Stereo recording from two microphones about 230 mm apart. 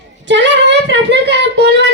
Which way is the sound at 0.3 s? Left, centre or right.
Right.